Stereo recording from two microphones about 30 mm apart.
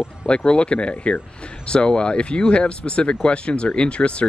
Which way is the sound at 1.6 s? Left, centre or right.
Left.